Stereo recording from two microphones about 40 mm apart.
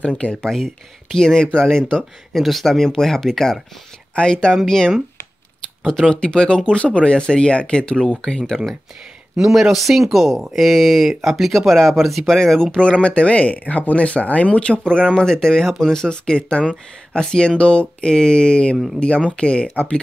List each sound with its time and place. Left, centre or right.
0.0 s speech: left
0.4 s speech: centre
2.3 s speech: centre
4.1 s speech: left
6.1 s speech: left
9.4 s speech: centre
13.0 s speech: left